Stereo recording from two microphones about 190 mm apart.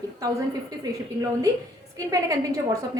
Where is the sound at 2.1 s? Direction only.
15° right (ahead or behind).